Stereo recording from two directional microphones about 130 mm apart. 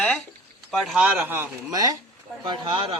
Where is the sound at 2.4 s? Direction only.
40° right (ahead or behind).